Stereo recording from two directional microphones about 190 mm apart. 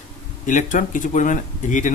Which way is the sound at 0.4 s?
45° left (ahead or behind).